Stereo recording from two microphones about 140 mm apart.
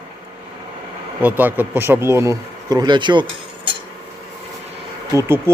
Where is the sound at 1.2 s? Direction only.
10° right (ahead or behind); by 3.2 s 35° right (ahead or behind).